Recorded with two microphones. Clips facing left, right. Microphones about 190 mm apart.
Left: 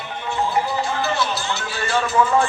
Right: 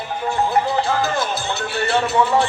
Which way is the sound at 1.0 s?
50° right (ahead or behind).